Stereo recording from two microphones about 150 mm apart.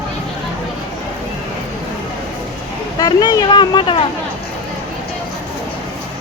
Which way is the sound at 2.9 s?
25° left (ahead or behind).